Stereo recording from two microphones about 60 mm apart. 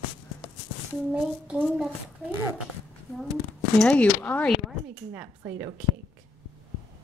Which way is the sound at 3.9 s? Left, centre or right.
Left.